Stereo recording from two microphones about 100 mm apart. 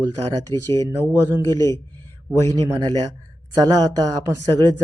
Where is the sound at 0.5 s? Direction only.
30° left (ahead or behind).